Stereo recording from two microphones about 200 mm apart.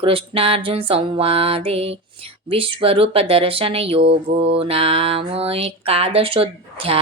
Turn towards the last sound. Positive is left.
turn(degrees=-30)  # may be behind; listen again after turning